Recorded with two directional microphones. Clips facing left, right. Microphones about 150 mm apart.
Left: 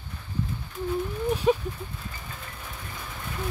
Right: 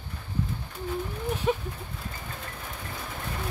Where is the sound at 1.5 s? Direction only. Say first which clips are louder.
Left 4 dB; 25° left (ahead or behind).